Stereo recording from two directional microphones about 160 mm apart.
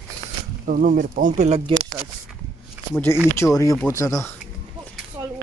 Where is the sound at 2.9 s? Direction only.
10° left (ahead or behind).